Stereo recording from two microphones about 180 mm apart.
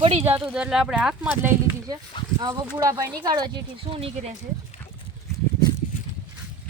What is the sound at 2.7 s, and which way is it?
Speech, 20° right (ahead or behind).